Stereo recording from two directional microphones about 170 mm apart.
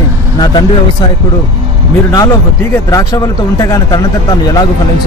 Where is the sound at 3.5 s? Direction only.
20° left (ahead or behind).